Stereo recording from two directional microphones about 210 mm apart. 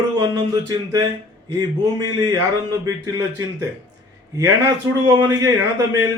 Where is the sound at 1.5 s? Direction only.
15° right (ahead or behind).